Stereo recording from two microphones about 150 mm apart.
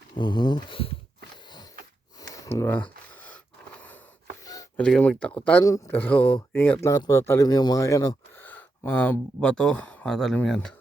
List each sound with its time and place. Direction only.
0.1 s speech: 30° left (ahead or behind)
2.2 s a sound: 20° left (ahead or behind)
4.8 s speech: 10° left (ahead or behind)
5.6 s speech: 20° left (ahead or behind)
8.4 s speech: 10° left (ahead or behind)